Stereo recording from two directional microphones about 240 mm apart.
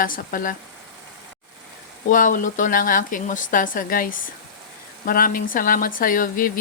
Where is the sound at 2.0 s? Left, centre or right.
Left.